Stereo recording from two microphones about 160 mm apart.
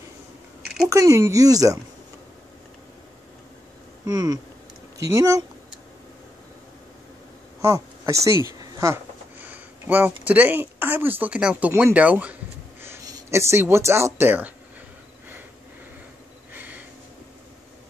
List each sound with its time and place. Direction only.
0.8 s speech: 20° right (ahead or behind)
4.0 s speech: 20° right (ahead or behind)
7.6 s speech: 20° right (ahead or behind)
12.8 s speech: 20° right (ahead or behind)
16.5 s a sound: 10° right (ahead or behind)